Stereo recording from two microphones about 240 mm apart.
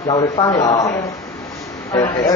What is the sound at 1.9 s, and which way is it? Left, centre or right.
Speech, centre.